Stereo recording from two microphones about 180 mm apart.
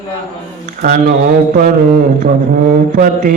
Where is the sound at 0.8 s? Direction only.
50° right (ahead or behind).